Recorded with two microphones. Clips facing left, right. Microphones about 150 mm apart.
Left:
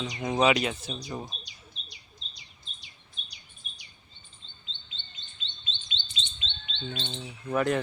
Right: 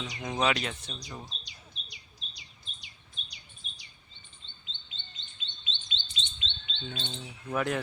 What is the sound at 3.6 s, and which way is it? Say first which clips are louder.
Bird vocalization: left 1 dB; 50° left (ahead or behind).